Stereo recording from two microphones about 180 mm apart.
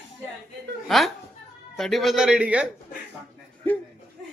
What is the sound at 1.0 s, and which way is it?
Speech, centre (ahead or behind).